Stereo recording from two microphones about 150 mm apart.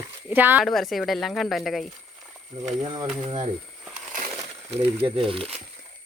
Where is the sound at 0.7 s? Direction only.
Centre (ahead or behind).